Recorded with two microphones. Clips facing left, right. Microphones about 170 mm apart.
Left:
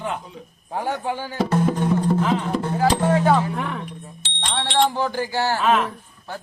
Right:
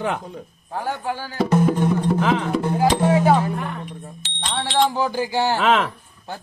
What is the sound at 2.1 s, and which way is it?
Music, 90° right.